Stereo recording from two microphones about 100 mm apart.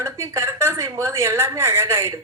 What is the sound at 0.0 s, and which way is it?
A woman's voice, 30° right (ahead or behind).